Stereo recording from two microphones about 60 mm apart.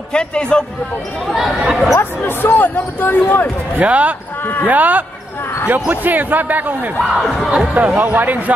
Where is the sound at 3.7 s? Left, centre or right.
Right.